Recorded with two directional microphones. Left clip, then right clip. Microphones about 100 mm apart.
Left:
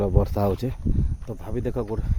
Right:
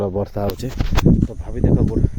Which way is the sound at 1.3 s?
35° left (ahead or behind).